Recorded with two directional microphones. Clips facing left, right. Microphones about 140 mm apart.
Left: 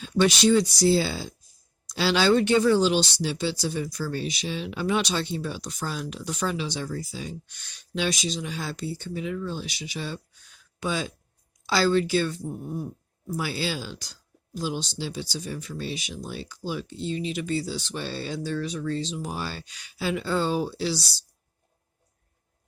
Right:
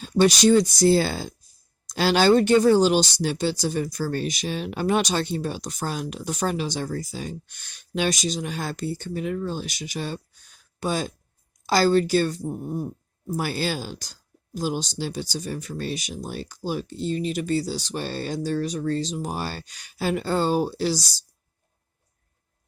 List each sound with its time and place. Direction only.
0.0 s a woman's voice: 40° right (ahead or behind)